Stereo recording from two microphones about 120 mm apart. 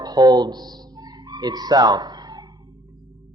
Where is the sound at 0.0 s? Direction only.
35° right (ahead or behind).